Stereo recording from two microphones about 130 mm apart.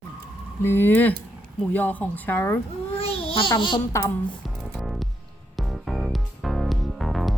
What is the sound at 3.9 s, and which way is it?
Speech, 25° left (ahead or behind).